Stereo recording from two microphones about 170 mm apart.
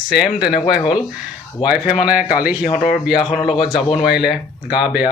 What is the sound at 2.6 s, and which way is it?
Speech, 45° left (ahead or behind).